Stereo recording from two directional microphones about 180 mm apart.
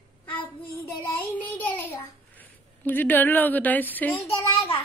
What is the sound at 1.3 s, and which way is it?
Speech, 10° left (ahead or behind).